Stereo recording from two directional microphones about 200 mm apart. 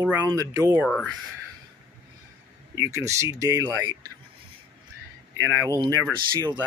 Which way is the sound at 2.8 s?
15° right (ahead or behind).